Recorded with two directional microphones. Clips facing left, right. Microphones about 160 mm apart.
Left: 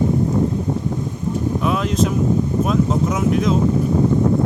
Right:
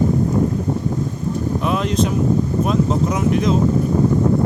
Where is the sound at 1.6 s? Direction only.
Centre (ahead or behind).